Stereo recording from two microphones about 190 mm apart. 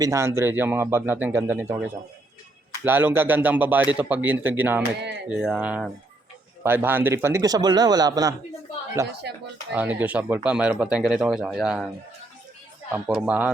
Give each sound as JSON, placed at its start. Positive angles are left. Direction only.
{"t": 0.0, "sound": "a man's voice", "side_deg": -15}
{"t": 12.9, "sound": "speech", "side_deg": -5}